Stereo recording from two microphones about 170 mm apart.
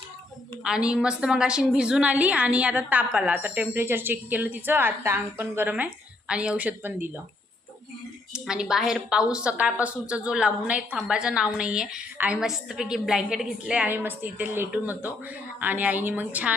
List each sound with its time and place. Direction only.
0.6 s a woman's voice: 5° right (ahead or behind)
8.3 s a woman's voice: 5° right (ahead or behind)